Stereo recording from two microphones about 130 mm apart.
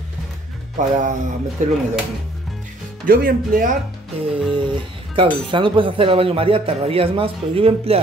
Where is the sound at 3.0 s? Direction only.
90° right.